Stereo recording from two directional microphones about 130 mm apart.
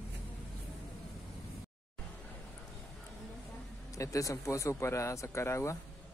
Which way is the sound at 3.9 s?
25° left (ahead or behind).